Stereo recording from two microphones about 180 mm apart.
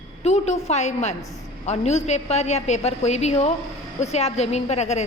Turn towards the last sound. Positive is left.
turn(degrees=40)  # may be behind; listen again after turning